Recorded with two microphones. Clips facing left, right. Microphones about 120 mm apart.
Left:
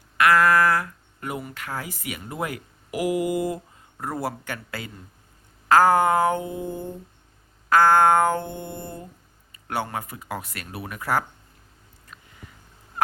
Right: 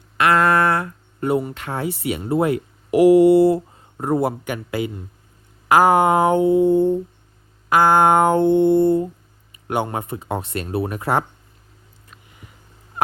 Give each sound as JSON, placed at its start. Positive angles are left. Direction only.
{"t": 0.2, "sound": "speech", "side_deg": -25}
{"t": 5.6, "sound": "a sound", "side_deg": -15}
{"t": 7.7, "sound": "speech", "side_deg": -15}